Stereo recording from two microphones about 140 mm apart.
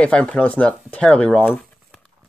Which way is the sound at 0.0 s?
10° left (ahead or behind).